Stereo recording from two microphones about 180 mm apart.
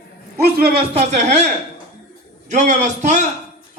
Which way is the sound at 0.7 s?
35° right (ahead or behind).